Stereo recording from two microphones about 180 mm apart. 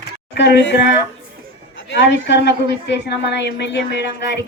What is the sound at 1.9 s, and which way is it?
A woman's voice, 75° left (ahead or behind).